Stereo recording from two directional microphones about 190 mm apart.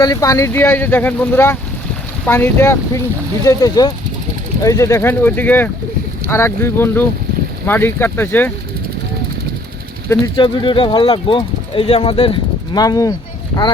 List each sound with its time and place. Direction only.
0.0 s speech: 20° left (ahead or behind)
10.3 s speech: 25° left (ahead or behind)